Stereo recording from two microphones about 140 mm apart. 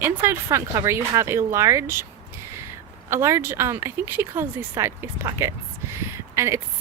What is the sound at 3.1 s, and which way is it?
Speech, 20° right (ahead or behind).